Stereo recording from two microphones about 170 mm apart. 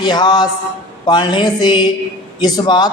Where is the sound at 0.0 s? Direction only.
25° left (ahead or behind).